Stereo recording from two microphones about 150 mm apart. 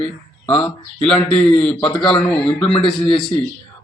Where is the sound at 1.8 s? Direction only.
35° left (ahead or behind).